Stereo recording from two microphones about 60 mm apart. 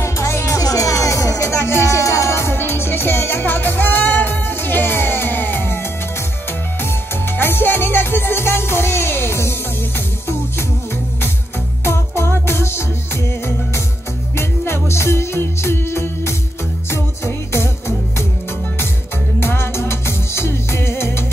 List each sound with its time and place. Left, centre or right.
0.0 s music: left
0.6 s music: left
7.3 s music: left
11.8 s music: left
14.3 s music: left
19.4 s music: left